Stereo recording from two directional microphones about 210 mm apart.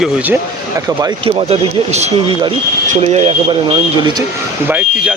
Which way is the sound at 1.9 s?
30° right (ahead or behind).